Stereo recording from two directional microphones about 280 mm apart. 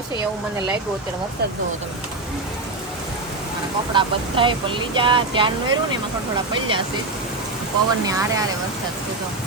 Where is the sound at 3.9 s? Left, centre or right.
Centre.